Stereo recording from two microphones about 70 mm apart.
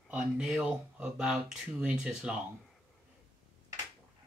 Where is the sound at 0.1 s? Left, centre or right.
Centre.